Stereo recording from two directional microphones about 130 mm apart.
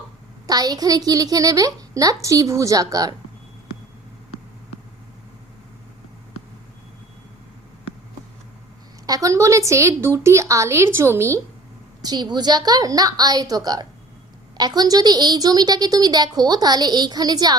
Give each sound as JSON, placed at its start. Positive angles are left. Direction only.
{"t": 0.4, "sound": "a woman's voice", "side_deg": -30}
{"t": 9.0, "sound": "a woman's voice", "side_deg": -25}
{"t": 12.0, "sound": "a woman's voice", "side_deg": -35}